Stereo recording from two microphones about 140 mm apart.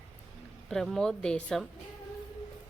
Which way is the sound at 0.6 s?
Centre (ahead or behind).